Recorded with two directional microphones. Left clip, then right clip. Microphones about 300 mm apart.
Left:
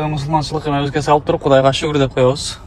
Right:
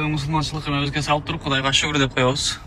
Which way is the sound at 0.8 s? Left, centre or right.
Left.